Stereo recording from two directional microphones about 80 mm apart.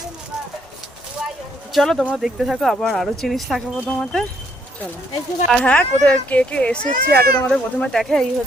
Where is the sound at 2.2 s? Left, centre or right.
Centre.